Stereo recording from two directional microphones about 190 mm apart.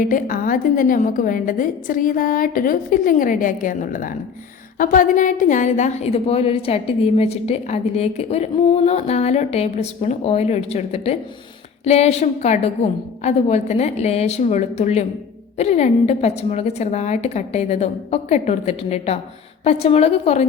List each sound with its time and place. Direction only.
0.0 s a woman's voice: 45° left (ahead or behind)